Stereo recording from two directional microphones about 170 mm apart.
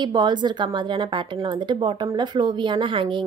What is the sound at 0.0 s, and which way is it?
A woman's voice, 25° right (ahead or behind).